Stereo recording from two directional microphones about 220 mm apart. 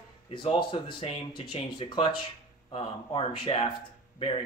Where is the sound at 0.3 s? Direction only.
20° left (ahead or behind).